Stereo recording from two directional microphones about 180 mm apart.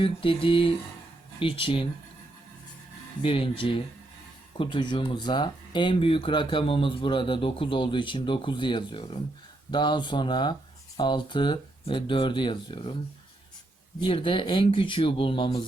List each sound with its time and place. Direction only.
0.0 s speech: 30° left (ahead or behind)
3.2 s speech: 30° left (ahead or behind)
14.0 s speech: 30° left (ahead or behind)